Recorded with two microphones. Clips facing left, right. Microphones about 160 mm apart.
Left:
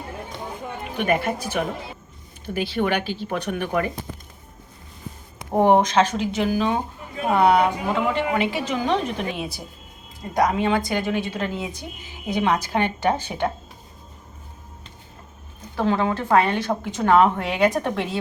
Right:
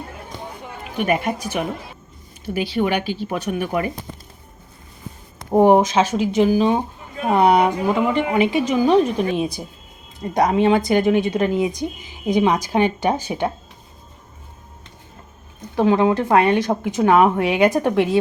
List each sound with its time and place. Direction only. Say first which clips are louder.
0.9 s speech: right 2 dB; 10° right (ahead or behind)
5.5 s speech: right 3 dB; 10° right (ahead or behind)
15.7 s speech: right 6 dB; 15° right (ahead or behind)